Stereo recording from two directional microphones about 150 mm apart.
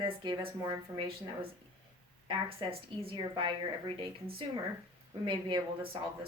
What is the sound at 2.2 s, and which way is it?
Speech, 35° right (ahead or behind).